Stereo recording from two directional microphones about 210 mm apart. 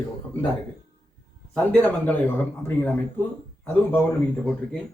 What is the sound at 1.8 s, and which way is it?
A man's voice, 10° left (ahead or behind).